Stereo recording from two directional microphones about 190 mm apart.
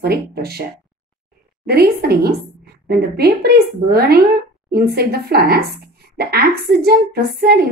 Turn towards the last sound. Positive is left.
turn(degrees=-55)  # may be behind; listen again after turning